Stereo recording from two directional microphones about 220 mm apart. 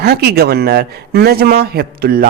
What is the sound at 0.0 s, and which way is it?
A man's voice, 45° right (ahead or behind).